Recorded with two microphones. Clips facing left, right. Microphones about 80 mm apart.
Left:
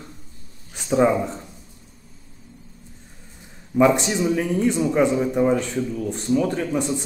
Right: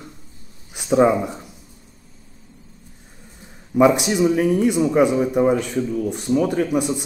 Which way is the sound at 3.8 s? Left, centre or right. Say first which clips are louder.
Right 2 dB; centre.